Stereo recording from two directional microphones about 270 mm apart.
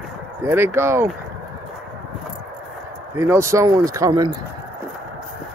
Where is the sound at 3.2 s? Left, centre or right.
Centre.